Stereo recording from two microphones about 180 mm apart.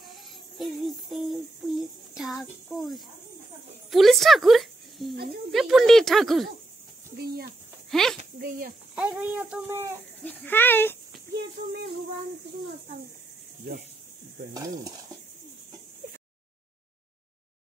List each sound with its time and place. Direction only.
0.6 s music: centre (ahead or behind)
1.7 s a child's voice: centre (ahead or behind)
7.9 s speech: centre (ahead or behind)
8.4 s speech: 55° right (ahead or behind)
8.9 s speech: 5° right (ahead or behind)
10.2 s speech: 10° left (ahead or behind)